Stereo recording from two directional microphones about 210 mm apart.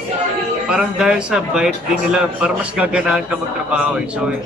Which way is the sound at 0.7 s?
5° right (ahead or behind).